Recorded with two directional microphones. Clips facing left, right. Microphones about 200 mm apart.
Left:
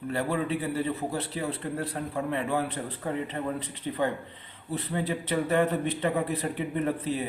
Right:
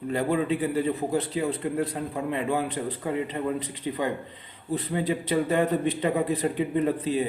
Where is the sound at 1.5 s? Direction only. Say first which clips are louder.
Right 4 dB; 15° right (ahead or behind).